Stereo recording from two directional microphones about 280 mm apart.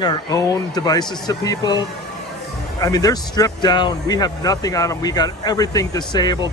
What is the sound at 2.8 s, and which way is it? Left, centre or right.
Speech, centre.